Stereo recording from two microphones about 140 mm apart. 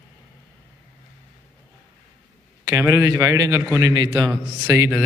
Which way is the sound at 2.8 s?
20° right (ahead or behind).